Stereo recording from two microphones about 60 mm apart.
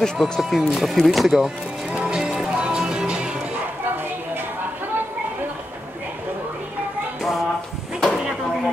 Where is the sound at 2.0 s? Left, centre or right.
Centre.